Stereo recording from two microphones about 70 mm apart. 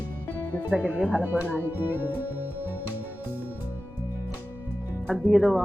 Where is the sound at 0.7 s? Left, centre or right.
Centre.